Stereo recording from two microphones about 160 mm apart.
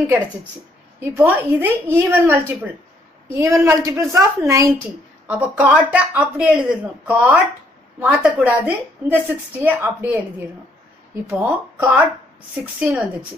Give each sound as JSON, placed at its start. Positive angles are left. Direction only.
{"t": 1.1, "sound": "a woman's voice", "side_deg": -10}
{"t": 11.2, "sound": "a woman's voice", "side_deg": -10}